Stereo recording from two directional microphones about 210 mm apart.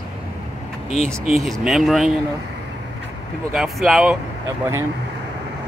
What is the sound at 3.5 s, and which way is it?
Speech, centre (ahead or behind).